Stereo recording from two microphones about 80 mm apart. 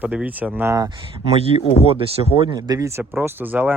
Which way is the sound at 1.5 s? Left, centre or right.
Right.